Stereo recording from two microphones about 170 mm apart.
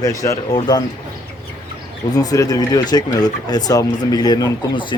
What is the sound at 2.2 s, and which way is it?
Speech, 20° left (ahead or behind).